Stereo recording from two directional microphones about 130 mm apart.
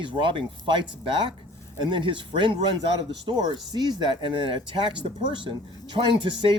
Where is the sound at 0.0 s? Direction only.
40° right (ahead or behind).